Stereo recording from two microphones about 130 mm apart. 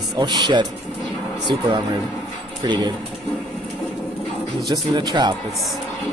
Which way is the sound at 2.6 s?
35° right (ahead or behind).